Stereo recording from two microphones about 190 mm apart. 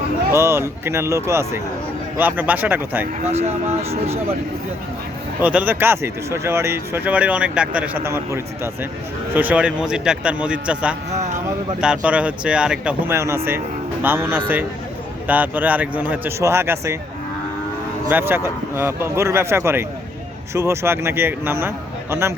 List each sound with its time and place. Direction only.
0.3 s speech: 15° right (ahead or behind)
3.2 s speech: 35° right (ahead or behind)
5.4 s speech: 10° right (ahead or behind)
18.1 s speech: 10° right (ahead or behind)